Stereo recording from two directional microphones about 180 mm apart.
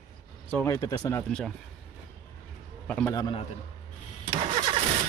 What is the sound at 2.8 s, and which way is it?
Speech, 10° left (ahead or behind).